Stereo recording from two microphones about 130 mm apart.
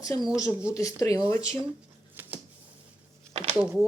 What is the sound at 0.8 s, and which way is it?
Speech, 25° left (ahead or behind).